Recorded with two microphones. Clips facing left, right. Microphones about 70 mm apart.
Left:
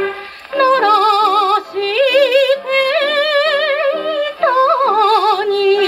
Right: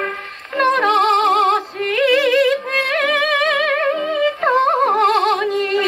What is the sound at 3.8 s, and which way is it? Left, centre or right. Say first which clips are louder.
Music: left 3 dB; centre.